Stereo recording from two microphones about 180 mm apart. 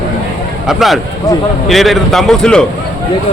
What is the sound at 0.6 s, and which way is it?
A man's voice, centre (ahead or behind).